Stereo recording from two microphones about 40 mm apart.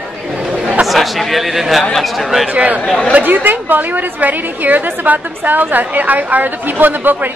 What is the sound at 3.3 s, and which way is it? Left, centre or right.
A woman's voice, right.